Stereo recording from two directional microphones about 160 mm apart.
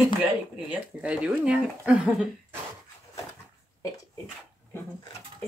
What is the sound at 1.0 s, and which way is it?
Speech, 10° right (ahead or behind).